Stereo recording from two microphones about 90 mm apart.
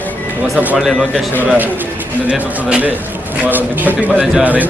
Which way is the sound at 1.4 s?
20° right (ahead or behind).